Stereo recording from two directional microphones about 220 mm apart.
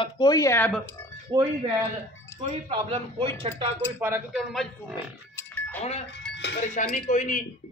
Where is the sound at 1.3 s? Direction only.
20° right (ahead or behind).